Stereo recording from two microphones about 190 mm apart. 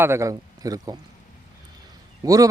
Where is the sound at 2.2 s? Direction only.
20° right (ahead or behind).